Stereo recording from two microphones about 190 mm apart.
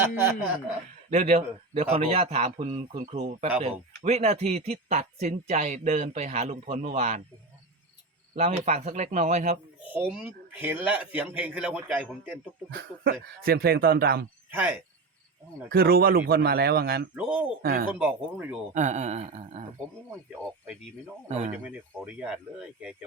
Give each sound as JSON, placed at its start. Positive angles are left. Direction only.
{"t": 0.0, "sound": "a man's voice", "side_deg": -15}
{"t": 1.1, "sound": "speech", "side_deg": -35}
{"t": 8.4, "sound": "speech", "side_deg": -35}
{"t": 9.9, "sound": "a man's voice", "side_deg": -10}
{"t": 12.7, "sound": "speech", "side_deg": -55}
{"t": 14.5, "sound": "a man's voice", "side_deg": -10}
{"t": 15.7, "sound": "speech", "side_deg": -50}
{"t": 17.2, "sound": "a man's voice", "side_deg": -5}
{"t": 17.6, "sound": "speech", "side_deg": -50}
{"t": 18.0, "sound": "a man's voice", "side_deg": -10}
{"t": 18.7, "sound": "speech", "side_deg": -40}
{"t": 21.2, "sound": "speech", "side_deg": -35}
{"t": 21.5, "sound": "a man's voice", "side_deg": -5}